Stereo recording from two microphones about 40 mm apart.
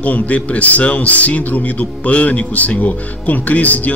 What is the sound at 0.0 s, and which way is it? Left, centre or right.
A man's voice, left.